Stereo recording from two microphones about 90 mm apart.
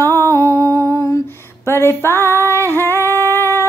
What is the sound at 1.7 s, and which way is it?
Female singing, 25° left (ahead or behind).